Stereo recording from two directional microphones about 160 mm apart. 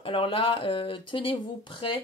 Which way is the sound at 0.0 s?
35° left (ahead or behind).